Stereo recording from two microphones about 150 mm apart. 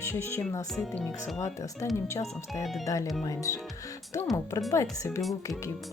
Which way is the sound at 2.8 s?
20° left (ahead or behind).